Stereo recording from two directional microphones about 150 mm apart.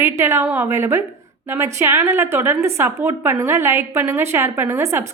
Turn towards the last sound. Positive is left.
turn(degrees=-20)  # may be behind; listen again after turning